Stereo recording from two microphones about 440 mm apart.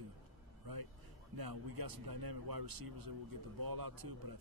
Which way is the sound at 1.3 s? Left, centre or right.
Right.